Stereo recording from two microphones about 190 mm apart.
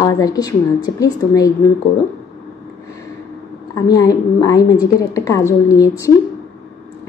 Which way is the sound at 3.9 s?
20° left (ahead or behind).